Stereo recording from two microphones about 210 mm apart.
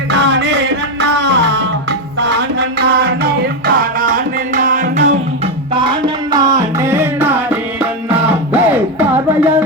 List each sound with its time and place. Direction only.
0.1 s music: 60° right (ahead or behind); by 5.1 s 35° right (ahead or behind)
5.7 s music: 25° right (ahead or behind)